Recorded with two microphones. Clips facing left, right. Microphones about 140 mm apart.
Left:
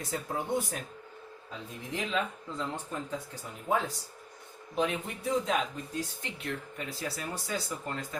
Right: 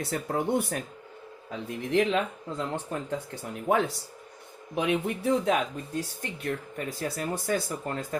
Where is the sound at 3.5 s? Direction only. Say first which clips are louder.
Right 5 dB; 75° right (ahead or behind).